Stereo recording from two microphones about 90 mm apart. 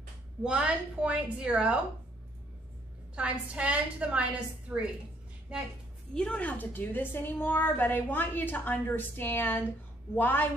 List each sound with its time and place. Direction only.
0.4 s a woman's voice: 10° right (ahead or behind)
3.2 s a woman's voice: 10° right (ahead or behind)
6.1 s a woman's voice: 10° left (ahead or behind)